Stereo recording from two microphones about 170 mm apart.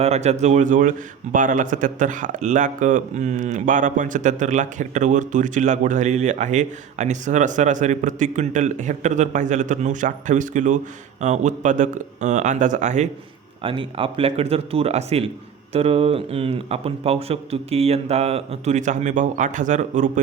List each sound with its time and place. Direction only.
0.0 s a man's voice: 40° right (ahead or behind)
13.6 s speech: 30° right (ahead or behind); by 20.2 s 45° right (ahead or behind)